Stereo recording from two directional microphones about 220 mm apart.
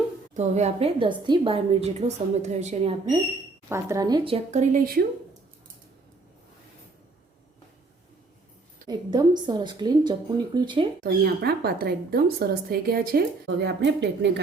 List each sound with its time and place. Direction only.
0.3 s a woman's voice: 30° right (ahead or behind)
8.9 s a woman's voice: 20° right (ahead or behind)
11.0 s speech: 45° right (ahead or behind)